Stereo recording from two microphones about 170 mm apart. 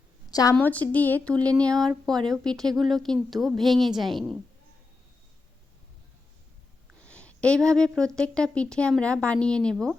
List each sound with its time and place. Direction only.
0.3 s a woman's voice: 20° left (ahead or behind)
0.5 s a woman's voice: 10° left (ahead or behind)
7.0 s a woman's voice: 5° left (ahead or behind)